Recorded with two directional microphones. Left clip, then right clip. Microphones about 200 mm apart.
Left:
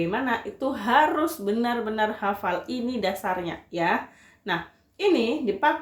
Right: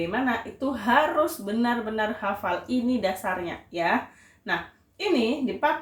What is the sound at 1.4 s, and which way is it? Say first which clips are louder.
A woman's voice: left 1 dB; 55° left (ahead or behind).